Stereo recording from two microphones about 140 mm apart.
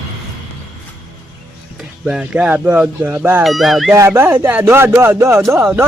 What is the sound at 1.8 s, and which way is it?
Speech, 5° right (ahead or behind).